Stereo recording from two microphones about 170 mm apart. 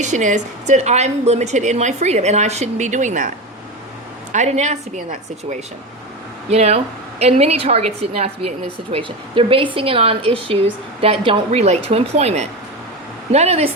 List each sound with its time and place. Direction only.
0.0 s a woman's voice: 45° right (ahead or behind)
6.5 s a woman's voice: 40° right (ahead or behind)
8.9 s a woman's voice: 30° right (ahead or behind)